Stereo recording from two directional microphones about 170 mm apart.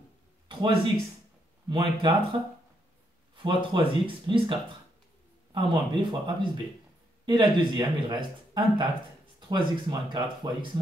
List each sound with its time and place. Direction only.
0.5 s speech: 30° right (ahead or behind)
3.3 s speech: 30° right (ahead or behind)